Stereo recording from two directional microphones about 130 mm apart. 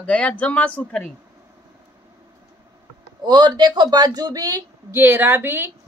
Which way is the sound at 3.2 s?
35° right (ahead or behind).